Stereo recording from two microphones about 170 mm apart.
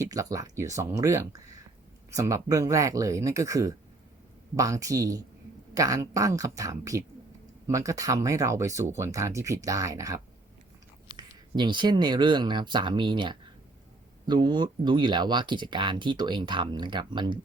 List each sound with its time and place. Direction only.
0.0 s speech: 20° right (ahead or behind)
11.2 s speech: 25° right (ahead or behind)